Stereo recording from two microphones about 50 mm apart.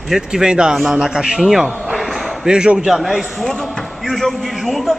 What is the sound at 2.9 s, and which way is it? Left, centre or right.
A man's voice, centre.